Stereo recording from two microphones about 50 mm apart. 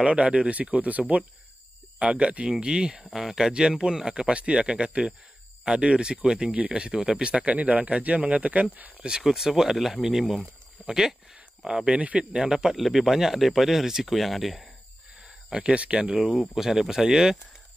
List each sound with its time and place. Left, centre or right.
0.0 s speech: right
9.0 s speech: centre
12.3 s speech: centre
15.2 s speech: right
16.2 s speech: centre